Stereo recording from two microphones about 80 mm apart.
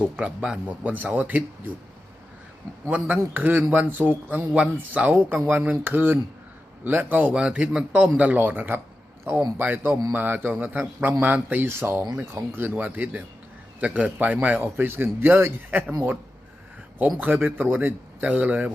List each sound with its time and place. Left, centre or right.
0.0 s a man's voice: centre
2.9 s a man's voice: right
17.2 s a man's voice: right